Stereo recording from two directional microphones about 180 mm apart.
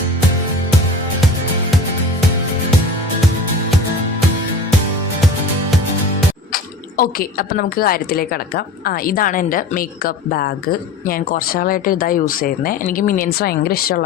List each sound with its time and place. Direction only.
6.5 s speech: 55° left (ahead or behind)